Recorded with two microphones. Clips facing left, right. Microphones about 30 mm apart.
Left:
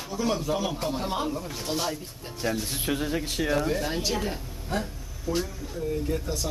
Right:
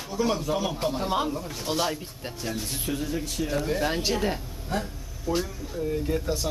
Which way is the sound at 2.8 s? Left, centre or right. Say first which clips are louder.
Left 2 dB; left.